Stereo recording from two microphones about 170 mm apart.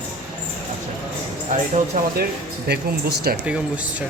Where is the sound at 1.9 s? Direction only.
50° right (ahead or behind).